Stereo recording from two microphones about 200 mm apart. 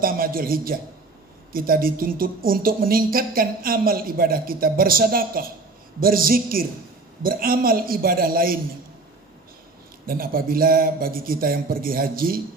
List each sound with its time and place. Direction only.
0.0 s a woman's voice: 45° right (ahead or behind)
10.1 s a woman's voice: 45° right (ahead or behind)